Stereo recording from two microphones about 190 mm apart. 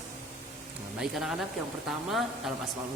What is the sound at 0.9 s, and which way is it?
Speech, centre (ahead or behind).